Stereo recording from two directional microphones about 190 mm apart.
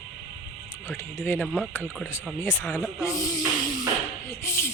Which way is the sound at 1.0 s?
10° left (ahead or behind).